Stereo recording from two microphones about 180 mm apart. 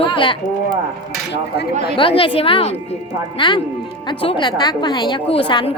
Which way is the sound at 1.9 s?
30° left (ahead or behind).